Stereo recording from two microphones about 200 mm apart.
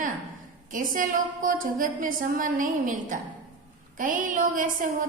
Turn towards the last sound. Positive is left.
turn(degrees=-40)  # may be behind; listen again after turning